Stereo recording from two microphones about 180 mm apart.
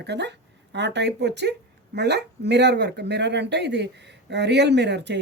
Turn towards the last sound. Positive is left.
turn(degrees=-70)  # may be behind; listen again after turning